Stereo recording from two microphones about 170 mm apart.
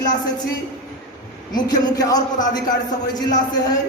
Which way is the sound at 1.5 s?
25° left (ahead or behind).